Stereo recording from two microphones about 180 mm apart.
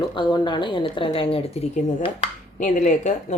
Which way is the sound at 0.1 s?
25° left (ahead or behind).